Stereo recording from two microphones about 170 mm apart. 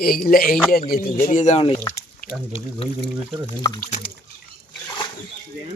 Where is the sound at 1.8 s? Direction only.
10° left (ahead or behind).